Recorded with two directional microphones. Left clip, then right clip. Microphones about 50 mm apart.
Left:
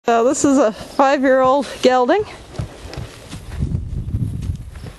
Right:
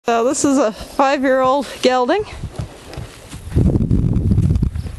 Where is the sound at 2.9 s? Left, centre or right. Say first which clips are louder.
Left 1 dB; right.